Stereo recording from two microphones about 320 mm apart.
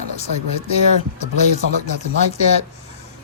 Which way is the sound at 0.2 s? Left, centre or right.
Centre.